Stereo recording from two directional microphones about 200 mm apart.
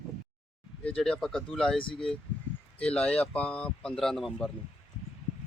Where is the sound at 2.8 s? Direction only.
5° left (ahead or behind).